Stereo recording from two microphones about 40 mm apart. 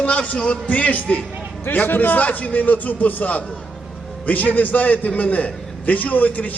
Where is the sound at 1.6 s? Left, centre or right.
Left.